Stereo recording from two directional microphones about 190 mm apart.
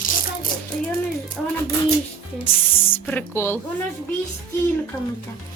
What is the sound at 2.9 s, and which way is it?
Speech, 10° left (ahead or behind).